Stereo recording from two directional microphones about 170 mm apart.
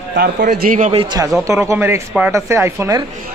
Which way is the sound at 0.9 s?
35° right (ahead or behind).